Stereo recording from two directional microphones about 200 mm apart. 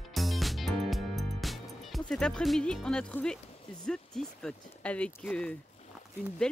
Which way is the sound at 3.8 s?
5° left (ahead or behind).